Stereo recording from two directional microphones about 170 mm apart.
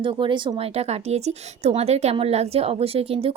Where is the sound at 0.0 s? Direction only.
30° right (ahead or behind).